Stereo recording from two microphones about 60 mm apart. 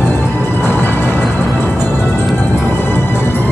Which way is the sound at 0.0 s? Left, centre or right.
Left.